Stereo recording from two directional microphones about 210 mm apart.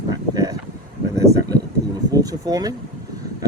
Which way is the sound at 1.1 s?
15° right (ahead or behind).